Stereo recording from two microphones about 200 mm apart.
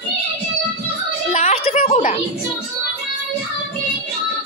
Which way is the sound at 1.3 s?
30° left (ahead or behind).